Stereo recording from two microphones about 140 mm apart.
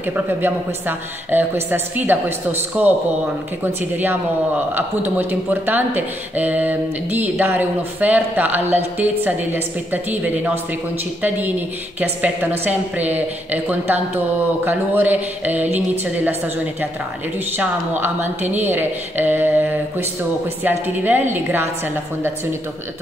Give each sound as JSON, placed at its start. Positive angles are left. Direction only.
{"t": 0.0, "sound": "a woman's voice", "side_deg": -15}
{"t": 17.6, "sound": "a woman's voice", "side_deg": -15}